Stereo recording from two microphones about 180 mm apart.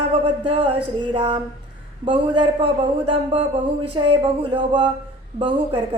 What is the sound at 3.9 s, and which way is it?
Speech, 30° right (ahead or behind).